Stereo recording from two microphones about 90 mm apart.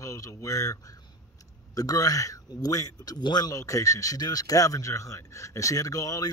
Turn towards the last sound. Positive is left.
turn(degrees=40)  # may be behind; listen again after turning